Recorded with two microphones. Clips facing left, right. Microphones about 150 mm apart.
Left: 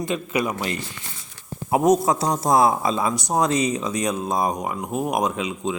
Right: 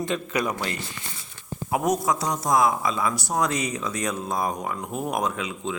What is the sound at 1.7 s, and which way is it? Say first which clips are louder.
A man's voice: left 6 dB; 25° left (ahead or behind).